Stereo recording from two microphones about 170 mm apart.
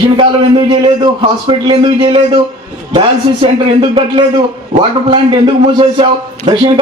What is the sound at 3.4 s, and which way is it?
Speech, 35° right (ahead or behind).